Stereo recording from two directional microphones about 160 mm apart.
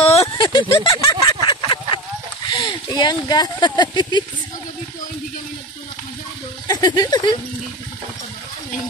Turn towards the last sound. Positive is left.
turn(degrees=25)  # may be behind; listen again after turning